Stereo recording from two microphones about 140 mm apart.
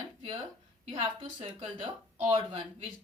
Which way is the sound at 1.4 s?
40° right (ahead or behind).